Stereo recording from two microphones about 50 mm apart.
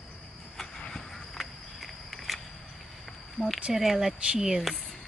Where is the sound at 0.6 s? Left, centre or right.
Centre.